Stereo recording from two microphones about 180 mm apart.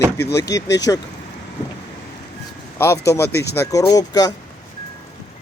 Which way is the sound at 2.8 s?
15° left (ahead or behind).